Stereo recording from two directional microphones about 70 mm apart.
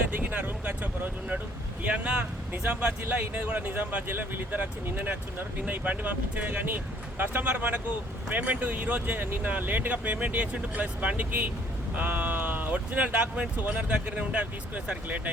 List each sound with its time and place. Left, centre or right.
0.2 s speech: right